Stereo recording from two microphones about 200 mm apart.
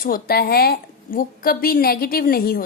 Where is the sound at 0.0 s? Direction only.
50° left (ahead or behind).